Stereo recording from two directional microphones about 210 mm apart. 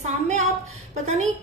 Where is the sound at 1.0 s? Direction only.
35° right (ahead or behind).